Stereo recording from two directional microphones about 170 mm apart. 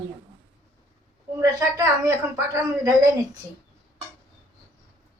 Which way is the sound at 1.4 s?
20° right (ahead or behind).